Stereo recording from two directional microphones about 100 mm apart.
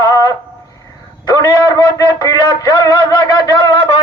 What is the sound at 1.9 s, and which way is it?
A man's voice, 40° left (ahead or behind).